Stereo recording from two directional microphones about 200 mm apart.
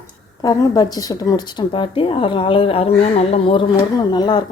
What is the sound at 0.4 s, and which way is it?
A woman's voice, 20° left (ahead or behind).